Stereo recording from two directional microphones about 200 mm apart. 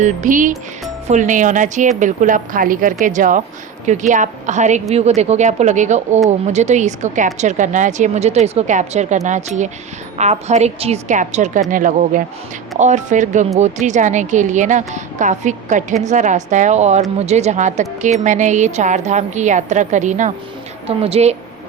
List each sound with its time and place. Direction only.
0.0 s a woman's voice: 40° right (ahead or behind)